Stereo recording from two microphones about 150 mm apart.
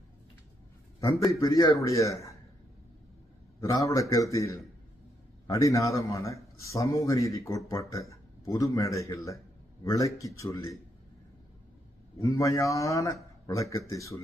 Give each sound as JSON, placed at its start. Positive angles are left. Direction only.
{"t": 1.0, "sound": "speech", "side_deg": 20}
{"t": 3.6, "sound": "speech", "side_deg": 20}
{"t": 12.2, "sound": "speech", "side_deg": 20}